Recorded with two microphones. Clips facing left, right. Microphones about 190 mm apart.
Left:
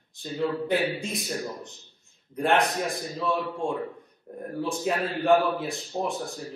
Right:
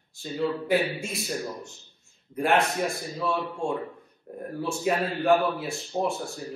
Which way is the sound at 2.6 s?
15° left (ahead or behind).